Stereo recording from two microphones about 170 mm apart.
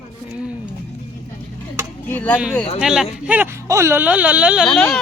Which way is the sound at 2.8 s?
5° right (ahead or behind).